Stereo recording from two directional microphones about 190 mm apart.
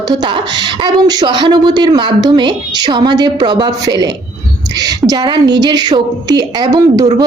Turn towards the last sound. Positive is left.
turn(degrees=-20)  # may be behind; listen again after turning